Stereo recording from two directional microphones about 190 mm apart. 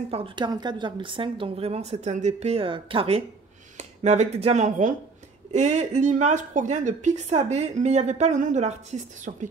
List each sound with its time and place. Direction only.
0.1 s a woman's voice: 25° right (ahead or behind)